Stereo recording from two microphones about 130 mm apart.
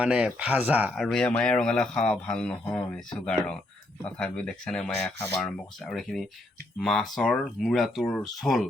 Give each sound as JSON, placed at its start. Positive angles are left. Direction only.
{"t": 0.0, "sound": "speech", "side_deg": -10}
{"t": 0.9, "sound": "speech", "side_deg": 5}
{"t": 5.1, "sound": "speech", "side_deg": 20}
{"t": 5.4, "sound": "speech", "side_deg": 5}